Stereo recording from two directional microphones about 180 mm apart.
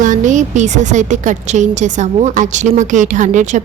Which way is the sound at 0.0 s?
45° right (ahead or behind).